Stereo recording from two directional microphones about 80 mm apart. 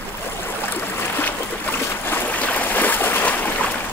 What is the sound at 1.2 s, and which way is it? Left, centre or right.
Boat, left.